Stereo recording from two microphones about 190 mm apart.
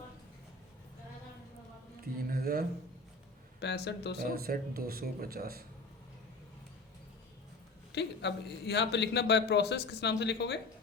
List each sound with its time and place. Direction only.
2.2 s a sound: 50° right (ahead or behind)
3.6 s a man's voice: 65° left (ahead or behind)
4.2 s speech: 50° right (ahead or behind)
7.9 s a man's voice: 65° left (ahead or behind)